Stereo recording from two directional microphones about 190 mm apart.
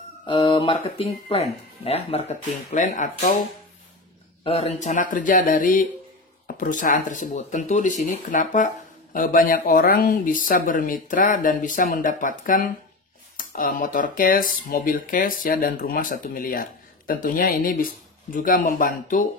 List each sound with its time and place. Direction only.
0.3 s speech: 25° left (ahead or behind); by 3.3 s 40° left (ahead or behind)
4.5 s speech: 35° left (ahead or behind)